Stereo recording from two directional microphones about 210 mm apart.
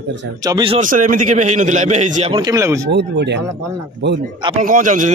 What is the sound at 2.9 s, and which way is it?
Speech, 55° right (ahead or behind).